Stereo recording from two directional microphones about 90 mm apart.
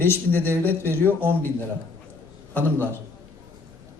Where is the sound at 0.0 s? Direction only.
25° left (ahead or behind).